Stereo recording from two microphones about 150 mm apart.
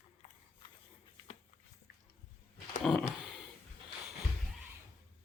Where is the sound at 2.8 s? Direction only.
5° left (ahead or behind).